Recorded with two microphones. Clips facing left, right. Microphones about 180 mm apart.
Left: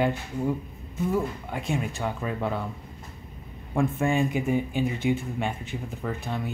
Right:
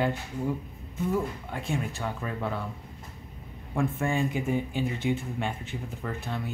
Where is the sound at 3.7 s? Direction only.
20° left (ahead or behind).